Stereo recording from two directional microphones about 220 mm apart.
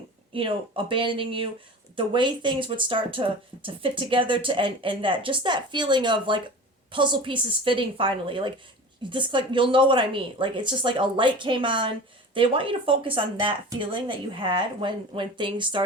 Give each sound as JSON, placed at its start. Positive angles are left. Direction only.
{"t": 0.3, "sound": "speech", "side_deg": -25}